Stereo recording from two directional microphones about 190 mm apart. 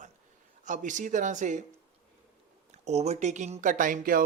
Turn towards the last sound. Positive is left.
turn(degrees=-45)  # may be behind; listen again after turning